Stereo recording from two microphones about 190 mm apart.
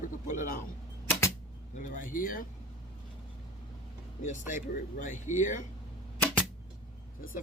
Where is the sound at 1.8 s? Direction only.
45° left (ahead or behind).